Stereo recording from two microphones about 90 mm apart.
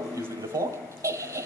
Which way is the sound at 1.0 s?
30° right (ahead or behind).